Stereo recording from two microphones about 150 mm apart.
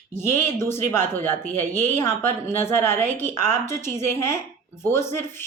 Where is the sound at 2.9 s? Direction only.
50° right (ahead or behind).